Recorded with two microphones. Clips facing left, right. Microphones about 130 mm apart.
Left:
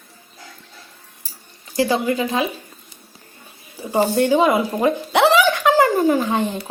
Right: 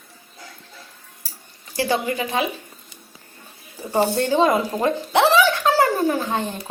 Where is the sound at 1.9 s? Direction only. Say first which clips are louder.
Even; 35° left (ahead or behind).